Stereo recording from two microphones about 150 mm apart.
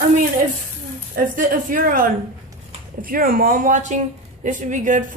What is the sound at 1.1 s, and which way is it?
A woman's voice, 70° right (ahead or behind).